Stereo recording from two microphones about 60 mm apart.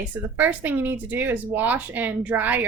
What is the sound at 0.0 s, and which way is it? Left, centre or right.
Speech, right.